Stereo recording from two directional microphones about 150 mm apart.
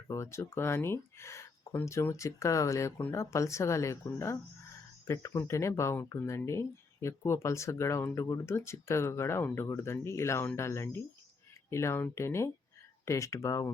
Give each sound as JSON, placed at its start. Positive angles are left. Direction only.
{"t": 0.1, "sound": "speech", "side_deg": 20}